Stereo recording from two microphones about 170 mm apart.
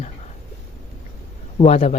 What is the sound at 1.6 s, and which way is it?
Speech, 35° left (ahead or behind).